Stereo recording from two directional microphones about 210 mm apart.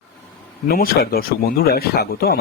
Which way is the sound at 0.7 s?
45° left (ahead or behind).